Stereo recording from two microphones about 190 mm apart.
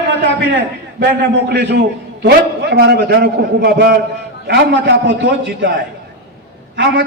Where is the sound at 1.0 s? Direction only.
60° right (ahead or behind).